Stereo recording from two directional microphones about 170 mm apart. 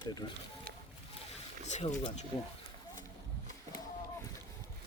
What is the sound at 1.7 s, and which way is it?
Speech, 45° left (ahead or behind).